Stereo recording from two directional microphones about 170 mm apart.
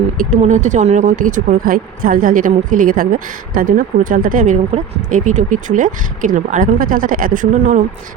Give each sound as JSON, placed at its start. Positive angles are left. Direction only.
{"t": 0.2, "sound": "speech", "side_deg": -45}
{"t": 4.7, "sound": "speech", "side_deg": -35}
{"t": 5.0, "sound": "speech", "side_deg": -45}